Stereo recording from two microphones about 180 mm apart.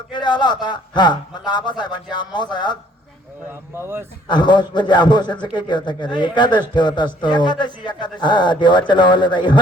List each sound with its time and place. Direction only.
0.1 s a man's voice: 25° left (ahead or behind)
3.8 s a man's voice: 15° right (ahead or behind)
4.3 s a man's voice: 25° left (ahead or behind)